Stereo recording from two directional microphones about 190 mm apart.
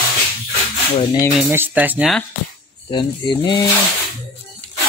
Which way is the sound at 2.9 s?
25° left (ahead or behind).